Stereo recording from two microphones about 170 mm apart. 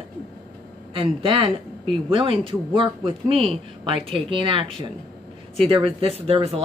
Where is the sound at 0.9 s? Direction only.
30° right (ahead or behind).